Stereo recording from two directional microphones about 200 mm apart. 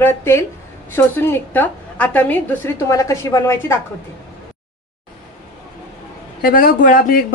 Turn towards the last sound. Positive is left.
turn(degrees=45)  # may be behind; listen again after turning